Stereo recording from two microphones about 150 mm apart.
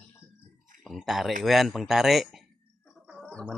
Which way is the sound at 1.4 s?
Centre (ahead or behind).